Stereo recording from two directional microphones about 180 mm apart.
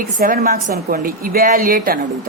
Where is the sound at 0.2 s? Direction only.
55° right (ahead or behind).